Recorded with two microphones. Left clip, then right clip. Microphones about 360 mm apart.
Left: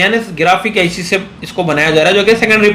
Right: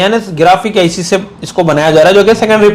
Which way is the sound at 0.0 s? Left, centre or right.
Right.